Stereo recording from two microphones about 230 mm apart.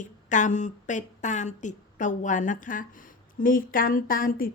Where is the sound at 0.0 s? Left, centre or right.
Left.